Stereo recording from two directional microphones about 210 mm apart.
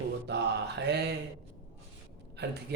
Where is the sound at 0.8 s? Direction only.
50° right (ahead or behind).